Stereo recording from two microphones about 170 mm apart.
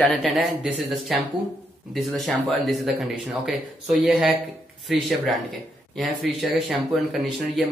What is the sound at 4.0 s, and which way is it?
Speech, centre (ahead or behind).